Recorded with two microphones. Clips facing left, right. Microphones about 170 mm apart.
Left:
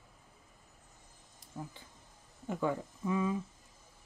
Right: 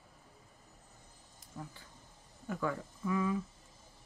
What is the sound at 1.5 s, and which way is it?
Speech, 20° left (ahead or behind).